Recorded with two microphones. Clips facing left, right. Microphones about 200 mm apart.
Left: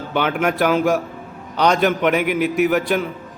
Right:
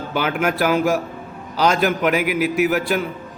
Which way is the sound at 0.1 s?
5° right (ahead or behind).